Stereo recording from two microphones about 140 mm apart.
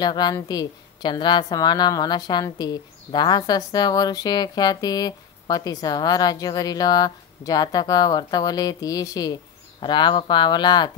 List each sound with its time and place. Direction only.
0.0 s a woman's voice: 30° left (ahead or behind)